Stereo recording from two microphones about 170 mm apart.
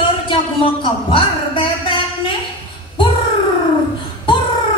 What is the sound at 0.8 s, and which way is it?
Speech, 30° left (ahead or behind).